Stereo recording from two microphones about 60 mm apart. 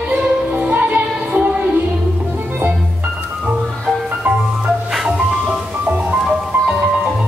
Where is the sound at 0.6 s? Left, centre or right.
Right.